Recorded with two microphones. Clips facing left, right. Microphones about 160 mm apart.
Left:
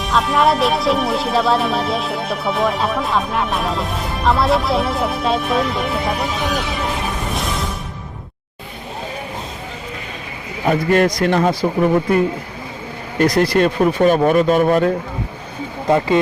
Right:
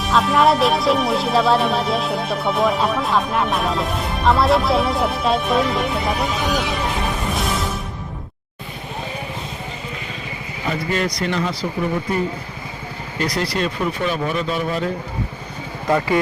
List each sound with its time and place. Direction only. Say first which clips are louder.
0.0 s speech: even; centre (ahead or behind)
10.7 s speech: left 8 dB; 50° left (ahead or behind)
15.9 s speech: left 3 dB; 25° left (ahead or behind)